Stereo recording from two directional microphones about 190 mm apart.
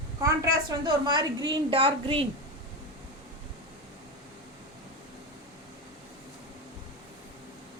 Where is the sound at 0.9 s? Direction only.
20° right (ahead or behind).